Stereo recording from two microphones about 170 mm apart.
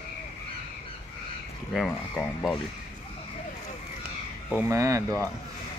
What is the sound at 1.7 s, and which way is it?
Speech, 5° left (ahead or behind).